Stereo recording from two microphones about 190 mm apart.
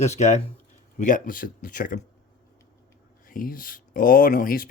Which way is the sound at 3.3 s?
50° left (ahead or behind).